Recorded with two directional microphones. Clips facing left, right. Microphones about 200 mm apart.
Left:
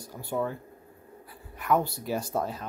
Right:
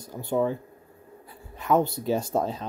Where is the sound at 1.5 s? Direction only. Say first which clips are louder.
Right 3 dB; 25° right (ahead or behind).